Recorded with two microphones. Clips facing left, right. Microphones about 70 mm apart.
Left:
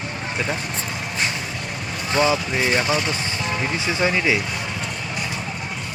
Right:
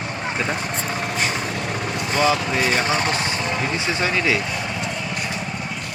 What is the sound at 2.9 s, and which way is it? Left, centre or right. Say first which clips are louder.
Vehicle: right 2 dB; right.